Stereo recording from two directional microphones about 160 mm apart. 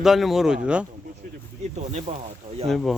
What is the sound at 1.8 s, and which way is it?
Speech, 45° right (ahead or behind).